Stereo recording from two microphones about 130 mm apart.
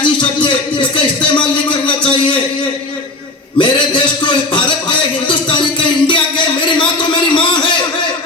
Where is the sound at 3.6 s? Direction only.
40° left (ahead or behind).